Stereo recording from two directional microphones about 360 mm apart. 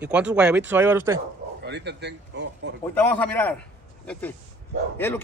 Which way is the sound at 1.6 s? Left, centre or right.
Right.